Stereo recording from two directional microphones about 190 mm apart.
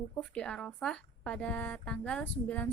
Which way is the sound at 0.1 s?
5° left (ahead or behind).